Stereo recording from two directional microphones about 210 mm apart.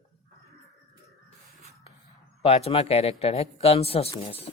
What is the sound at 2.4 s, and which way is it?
Speech, 30° left (ahead or behind).